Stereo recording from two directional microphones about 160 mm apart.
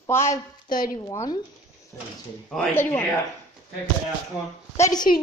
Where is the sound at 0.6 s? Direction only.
60° left (ahead or behind).